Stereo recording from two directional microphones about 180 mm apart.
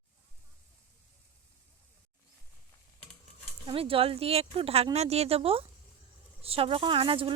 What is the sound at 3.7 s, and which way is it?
A woman's voice, 30° right (ahead or behind).